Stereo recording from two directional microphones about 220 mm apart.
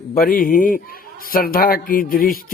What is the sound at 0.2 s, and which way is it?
Speech, 40° left (ahead or behind).